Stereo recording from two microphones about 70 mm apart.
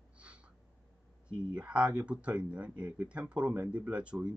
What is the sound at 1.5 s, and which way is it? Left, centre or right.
Speech, centre.